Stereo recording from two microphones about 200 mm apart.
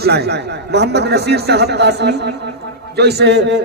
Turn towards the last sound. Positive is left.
turn(degrees=-60)  # may be behind; listen again after turning